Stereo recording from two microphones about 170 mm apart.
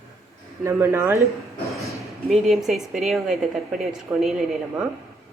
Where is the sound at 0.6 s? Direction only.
15° right (ahead or behind).